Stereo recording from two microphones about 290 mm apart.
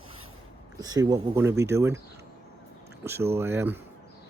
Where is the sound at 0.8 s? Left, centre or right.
Centre.